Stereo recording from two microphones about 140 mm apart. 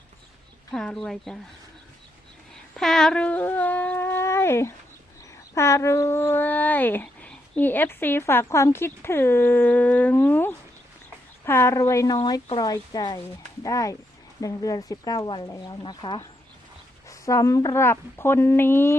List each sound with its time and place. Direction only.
0.7 s speech: 5° left (ahead or behind)
2.7 s shofar: 5° left (ahead or behind); by 4.7 s 20° left (ahead or behind)
5.5 s speech: 20° left (ahead or behind)
12.1 s speech: 35° left (ahead or behind); by 18.9 s 15° left (ahead or behind)